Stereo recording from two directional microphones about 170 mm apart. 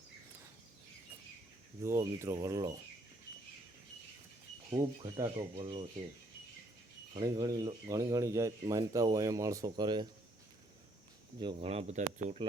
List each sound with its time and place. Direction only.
1.8 s speech: 15° right (ahead or behind)
4.8 s speech: 25° right (ahead or behind)
7.1 s speech: 25° right (ahead or behind)
11.3 s speech: 30° right (ahead or behind)